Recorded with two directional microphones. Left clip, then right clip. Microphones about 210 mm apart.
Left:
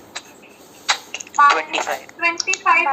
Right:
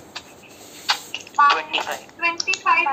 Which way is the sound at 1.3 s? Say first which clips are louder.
Left 3 dB; 20° left (ahead or behind).